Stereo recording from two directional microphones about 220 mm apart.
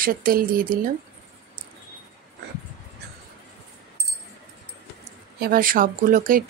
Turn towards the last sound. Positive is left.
turn(degrees=-40)  # may be behind; listen again after turning